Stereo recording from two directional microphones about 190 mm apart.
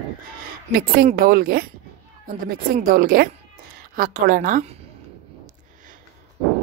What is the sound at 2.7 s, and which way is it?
A woman's voice, 50° right (ahead or behind).